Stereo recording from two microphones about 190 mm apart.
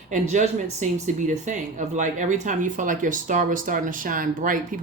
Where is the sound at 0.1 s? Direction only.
40° right (ahead or behind).